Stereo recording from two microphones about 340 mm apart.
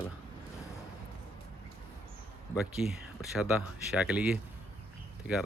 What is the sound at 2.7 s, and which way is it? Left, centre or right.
Speech, centre.